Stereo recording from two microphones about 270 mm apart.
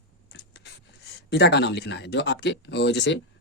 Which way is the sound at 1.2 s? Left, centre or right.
Left.